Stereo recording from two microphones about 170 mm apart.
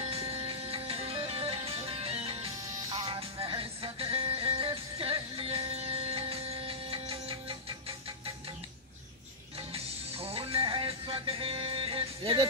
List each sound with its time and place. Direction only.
0.1 s music: 35° right (ahead or behind)
10.1 s music: 35° right (ahead or behind)